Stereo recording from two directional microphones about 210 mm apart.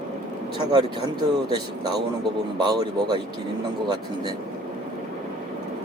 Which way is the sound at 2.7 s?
20° right (ahead or behind).